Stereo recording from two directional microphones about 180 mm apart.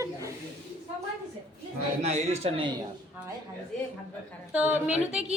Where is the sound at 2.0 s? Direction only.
35° right (ahead or behind).